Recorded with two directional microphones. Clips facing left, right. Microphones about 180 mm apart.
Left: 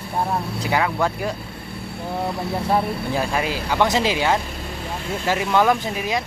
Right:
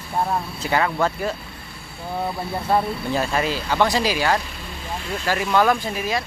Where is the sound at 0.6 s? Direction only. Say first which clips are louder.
Even; 10° left (ahead or behind).